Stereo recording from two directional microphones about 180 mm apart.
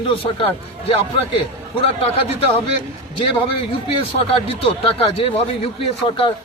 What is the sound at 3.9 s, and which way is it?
Speech, 30° left (ahead or behind).